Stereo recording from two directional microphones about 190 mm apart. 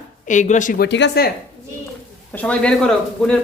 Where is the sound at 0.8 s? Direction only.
65° left (ahead or behind).